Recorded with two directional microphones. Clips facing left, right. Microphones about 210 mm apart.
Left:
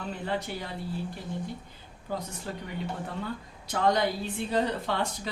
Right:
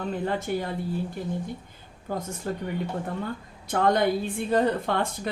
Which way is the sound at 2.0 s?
50° right (ahead or behind).